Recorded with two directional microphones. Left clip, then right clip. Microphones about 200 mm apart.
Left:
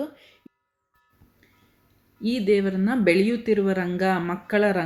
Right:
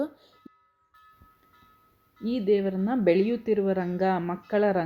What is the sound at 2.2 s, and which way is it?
Speech, 10° right (ahead or behind).